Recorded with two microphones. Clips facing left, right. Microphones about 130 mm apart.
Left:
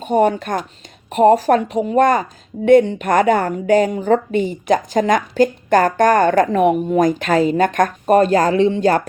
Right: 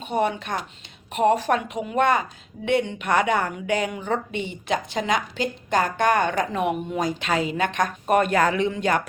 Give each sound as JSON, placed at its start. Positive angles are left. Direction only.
{"t": 0.0, "sound": "a woman's voice", "side_deg": 45}